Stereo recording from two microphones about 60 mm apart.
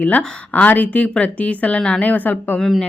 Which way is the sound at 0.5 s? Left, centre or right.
Left.